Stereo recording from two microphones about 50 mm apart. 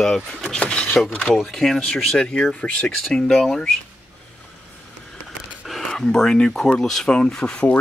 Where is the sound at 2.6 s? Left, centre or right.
Left.